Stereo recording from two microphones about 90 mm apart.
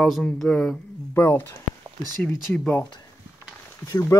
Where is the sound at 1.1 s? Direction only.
25° left (ahead or behind).